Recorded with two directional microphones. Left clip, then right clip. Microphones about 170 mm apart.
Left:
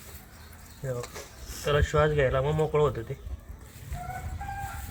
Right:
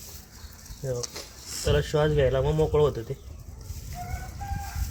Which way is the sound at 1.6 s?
35° right (ahead or behind).